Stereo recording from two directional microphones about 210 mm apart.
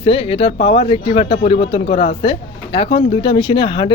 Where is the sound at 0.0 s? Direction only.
25° left (ahead or behind).